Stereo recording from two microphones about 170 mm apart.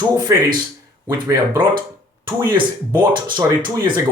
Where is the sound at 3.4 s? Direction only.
25° right (ahead or behind).